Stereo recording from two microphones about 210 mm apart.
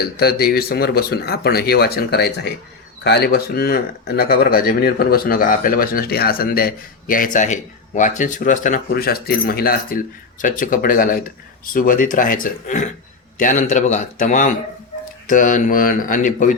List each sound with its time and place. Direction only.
0.0 s speech: 50° left (ahead or behind)